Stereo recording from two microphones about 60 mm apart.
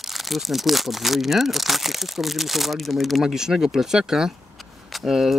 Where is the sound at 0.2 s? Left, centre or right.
Centre.